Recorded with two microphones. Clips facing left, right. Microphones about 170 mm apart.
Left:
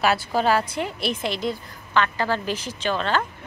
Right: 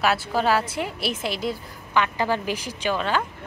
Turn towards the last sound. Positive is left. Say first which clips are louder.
# even
turn(degrees=-10)  # may be behind; listen again after turning